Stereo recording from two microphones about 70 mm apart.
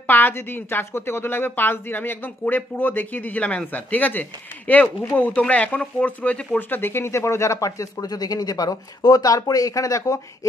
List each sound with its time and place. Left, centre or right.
0.0 s a woman's voice: left
6.8 s speech: left